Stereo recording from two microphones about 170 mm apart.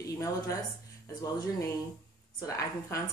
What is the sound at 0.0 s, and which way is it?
A woman's voice, 20° left (ahead or behind).